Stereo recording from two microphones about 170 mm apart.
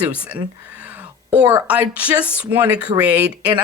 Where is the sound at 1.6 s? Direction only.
10° right (ahead or behind).